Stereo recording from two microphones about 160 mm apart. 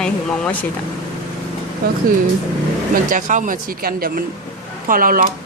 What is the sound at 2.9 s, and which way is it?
Speech, 55° right (ahead or behind).